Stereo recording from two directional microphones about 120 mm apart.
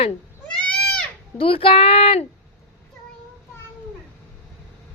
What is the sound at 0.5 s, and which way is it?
Goat, 10° left (ahead or behind).